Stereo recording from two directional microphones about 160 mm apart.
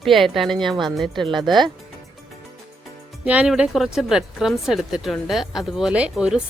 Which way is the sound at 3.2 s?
5° right (ahead or behind).